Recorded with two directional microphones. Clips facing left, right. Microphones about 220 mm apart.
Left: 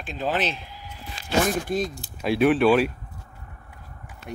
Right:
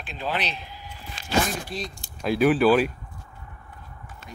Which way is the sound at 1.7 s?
50° left (ahead or behind).